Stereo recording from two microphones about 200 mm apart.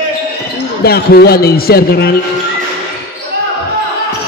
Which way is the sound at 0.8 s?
50° left (ahead or behind).